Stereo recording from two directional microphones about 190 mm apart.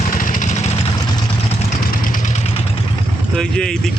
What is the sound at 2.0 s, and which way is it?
Vehicle, 45° left (ahead or behind).